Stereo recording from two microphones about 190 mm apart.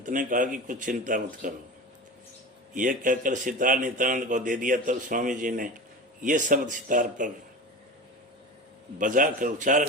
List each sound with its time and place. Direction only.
0.0 s a man's voice: 45° right (ahead or behind)
2.7 s a man's voice: 45° right (ahead or behind)
9.0 s a man's voice: 45° right (ahead or behind)